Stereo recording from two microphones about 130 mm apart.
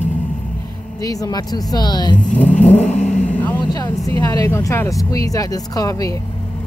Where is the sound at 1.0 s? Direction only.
25° left (ahead or behind).